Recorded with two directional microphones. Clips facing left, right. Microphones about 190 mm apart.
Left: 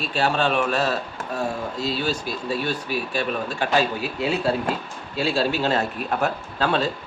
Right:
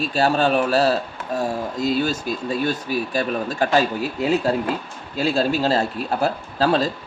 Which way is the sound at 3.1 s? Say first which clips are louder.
Right 3 dB; 40° right (ahead or behind).